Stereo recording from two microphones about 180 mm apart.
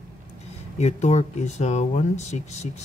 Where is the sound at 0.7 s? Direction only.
40° left (ahead or behind).